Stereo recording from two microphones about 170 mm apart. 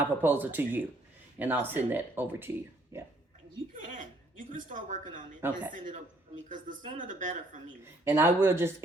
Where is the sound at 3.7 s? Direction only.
50° right (ahead or behind).